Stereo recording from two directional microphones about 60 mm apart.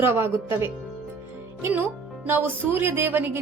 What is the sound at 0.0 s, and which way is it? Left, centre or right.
Speech, right.